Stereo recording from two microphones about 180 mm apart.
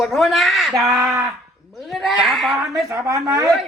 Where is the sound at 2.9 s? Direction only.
20° right (ahead or behind).